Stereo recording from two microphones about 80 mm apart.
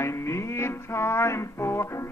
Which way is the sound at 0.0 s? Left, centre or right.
Left.